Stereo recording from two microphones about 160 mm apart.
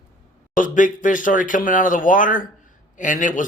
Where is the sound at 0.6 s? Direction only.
55° left (ahead or behind).